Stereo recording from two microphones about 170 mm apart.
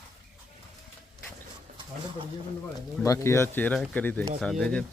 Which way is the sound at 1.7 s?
50° right (ahead or behind).